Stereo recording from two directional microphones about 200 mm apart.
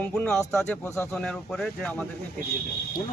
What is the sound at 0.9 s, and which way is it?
Speech, 15° left (ahead or behind).